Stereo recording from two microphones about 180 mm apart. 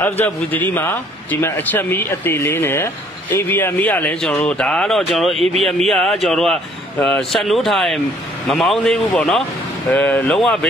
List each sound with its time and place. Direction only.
0.0 s a man's voice: 10° left (ahead or behind)